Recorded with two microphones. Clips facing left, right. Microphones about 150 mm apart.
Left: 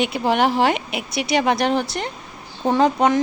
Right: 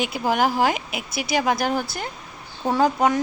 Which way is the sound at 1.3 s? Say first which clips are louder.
Left 3 dB; 5° right (ahead or behind).